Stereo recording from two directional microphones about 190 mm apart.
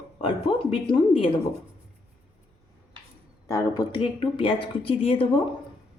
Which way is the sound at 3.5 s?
15° left (ahead or behind).